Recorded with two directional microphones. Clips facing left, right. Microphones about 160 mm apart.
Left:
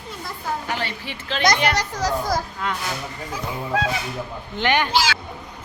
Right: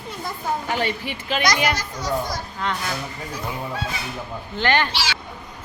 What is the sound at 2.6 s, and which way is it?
Speech, 5° left (ahead or behind).